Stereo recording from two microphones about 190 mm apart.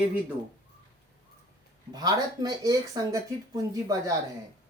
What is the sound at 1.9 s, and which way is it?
Speech, 20° right (ahead or behind).